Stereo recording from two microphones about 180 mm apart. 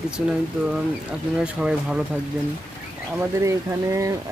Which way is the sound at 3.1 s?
15° right (ahead or behind).